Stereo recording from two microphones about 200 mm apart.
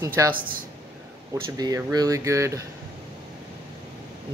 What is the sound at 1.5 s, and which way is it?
Speech, 20° right (ahead or behind).